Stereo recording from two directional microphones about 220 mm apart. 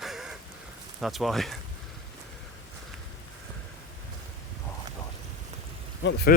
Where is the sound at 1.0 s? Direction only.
Centre (ahead or behind).